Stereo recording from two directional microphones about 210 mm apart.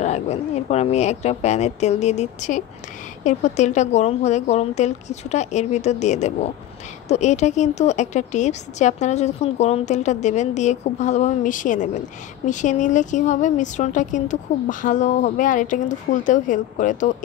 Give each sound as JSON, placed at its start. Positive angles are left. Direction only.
{"t": 0.0, "sound": "a woman's voice", "side_deg": 30}